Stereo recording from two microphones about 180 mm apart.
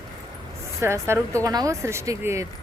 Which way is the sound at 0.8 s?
15° right (ahead or behind).